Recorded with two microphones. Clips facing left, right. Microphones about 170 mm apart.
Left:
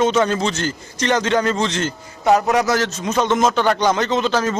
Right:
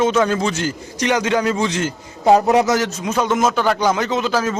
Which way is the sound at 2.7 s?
15° right (ahead or behind).